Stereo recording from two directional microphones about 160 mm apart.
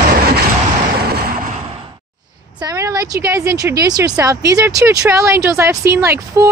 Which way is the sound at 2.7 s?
20° right (ahead or behind).